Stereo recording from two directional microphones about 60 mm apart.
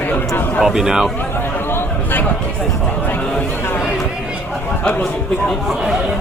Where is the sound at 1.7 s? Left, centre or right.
Left.